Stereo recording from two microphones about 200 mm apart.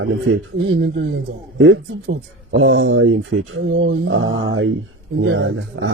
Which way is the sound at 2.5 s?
85° right.